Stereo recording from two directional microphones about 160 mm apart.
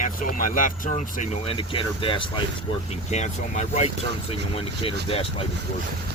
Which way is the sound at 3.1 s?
45° left (ahead or behind).